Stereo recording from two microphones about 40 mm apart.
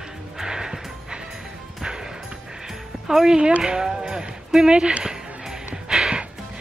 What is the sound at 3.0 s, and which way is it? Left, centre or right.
Speech, centre.